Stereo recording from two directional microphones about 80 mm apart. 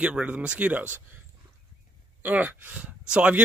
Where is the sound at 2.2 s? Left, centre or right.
Right.